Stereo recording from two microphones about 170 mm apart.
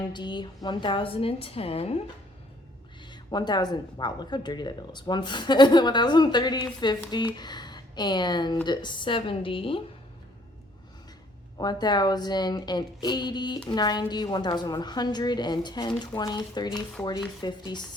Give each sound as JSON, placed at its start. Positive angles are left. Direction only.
{"t": 0.1, "sound": "a woman's voice", "side_deg": 25}
{"t": 3.0, "sound": "a woman's voice", "side_deg": 25}
{"t": 11.5, "sound": "speech", "side_deg": 25}